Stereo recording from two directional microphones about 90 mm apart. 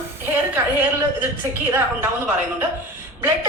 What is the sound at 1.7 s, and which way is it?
Speech, 20° right (ahead or behind).